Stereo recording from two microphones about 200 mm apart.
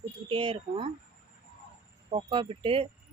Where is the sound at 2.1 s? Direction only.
25° right (ahead or behind).